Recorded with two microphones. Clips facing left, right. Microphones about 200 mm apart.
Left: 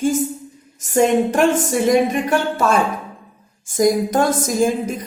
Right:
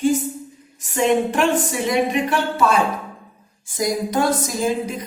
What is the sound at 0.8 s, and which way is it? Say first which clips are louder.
A woman's voice: left 3 dB; 45° left (ahead or behind).